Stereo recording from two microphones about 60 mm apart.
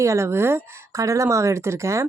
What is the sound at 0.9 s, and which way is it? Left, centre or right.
Speech, right.